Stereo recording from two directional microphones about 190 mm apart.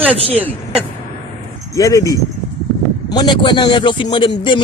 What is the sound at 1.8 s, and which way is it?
Speech, 15° left (ahead or behind).